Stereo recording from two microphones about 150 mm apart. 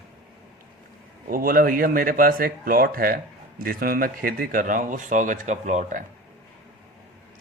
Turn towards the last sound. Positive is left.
turn(degrees=-55)  # may be behind; listen again after turning